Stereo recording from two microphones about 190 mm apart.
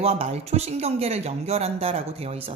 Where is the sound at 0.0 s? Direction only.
35° right (ahead or behind).